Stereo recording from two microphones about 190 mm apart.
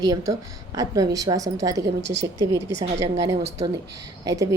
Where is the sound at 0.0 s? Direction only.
20° right (ahead or behind).